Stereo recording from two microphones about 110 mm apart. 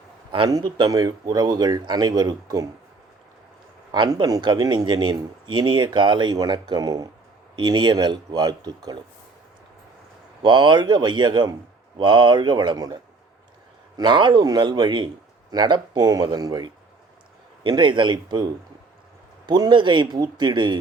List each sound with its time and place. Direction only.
0.3 s a man's voice: 45° right (ahead or behind)
4.1 s a man's voice: 35° right (ahead or behind)
10.4 s a man's voice: 45° right (ahead or behind)
17.6 s speech: 45° right (ahead or behind)